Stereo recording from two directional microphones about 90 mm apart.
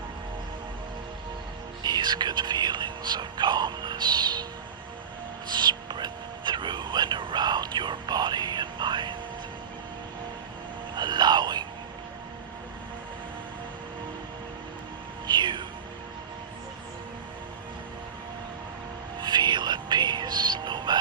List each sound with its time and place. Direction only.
1.8 s music: 55° right (ahead or behind)
5.5 s whispering: 55° right (ahead or behind)
10.9 s a sound: 55° right (ahead or behind)
15.3 s music: 55° right (ahead or behind)
19.2 s music: 55° right (ahead or behind)